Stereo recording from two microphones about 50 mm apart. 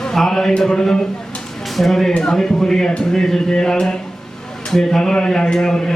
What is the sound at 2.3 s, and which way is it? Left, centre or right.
A man's voice, centre.